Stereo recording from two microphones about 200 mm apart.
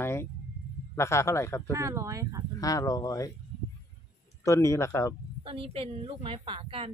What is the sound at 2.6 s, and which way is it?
Speech, 15° left (ahead or behind).